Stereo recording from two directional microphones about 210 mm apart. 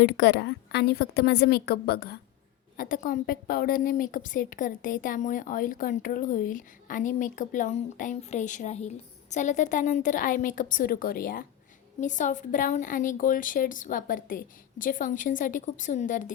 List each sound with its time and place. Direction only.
0.0 s a woman's voice: 55° left (ahead or behind); by 16.3 s 40° left (ahead or behind)